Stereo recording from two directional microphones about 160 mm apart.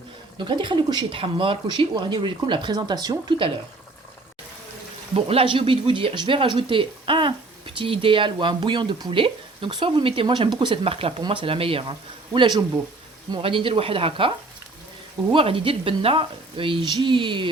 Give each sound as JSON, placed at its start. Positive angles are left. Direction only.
{"t": 0.3, "sound": "speech", "side_deg": -30}
{"t": 5.1, "sound": "speech", "side_deg": -35}